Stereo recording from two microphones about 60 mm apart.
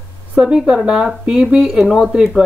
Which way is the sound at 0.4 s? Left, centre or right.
Centre.